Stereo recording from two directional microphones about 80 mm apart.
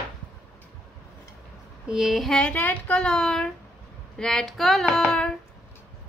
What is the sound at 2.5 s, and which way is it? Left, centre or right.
Speech, left.